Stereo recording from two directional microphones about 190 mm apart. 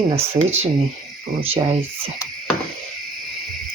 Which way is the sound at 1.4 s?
30° right (ahead or behind).